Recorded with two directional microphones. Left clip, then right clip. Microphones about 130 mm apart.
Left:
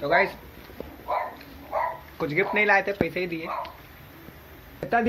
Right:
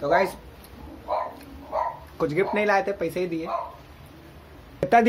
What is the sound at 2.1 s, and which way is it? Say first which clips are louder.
Speech: even; 25° right (ahead or behind).